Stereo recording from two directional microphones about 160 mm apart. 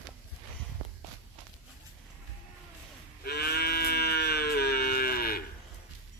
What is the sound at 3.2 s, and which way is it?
Livestock, 75° left (ahead or behind).